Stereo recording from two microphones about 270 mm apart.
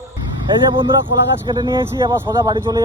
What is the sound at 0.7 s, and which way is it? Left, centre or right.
Speech, centre.